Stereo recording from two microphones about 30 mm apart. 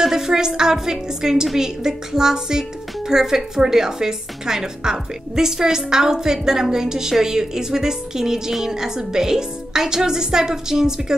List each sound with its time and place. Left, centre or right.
0.0 s a woman's voice: centre